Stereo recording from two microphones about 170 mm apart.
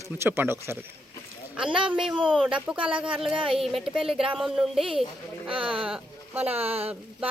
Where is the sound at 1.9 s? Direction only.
Centre (ahead or behind).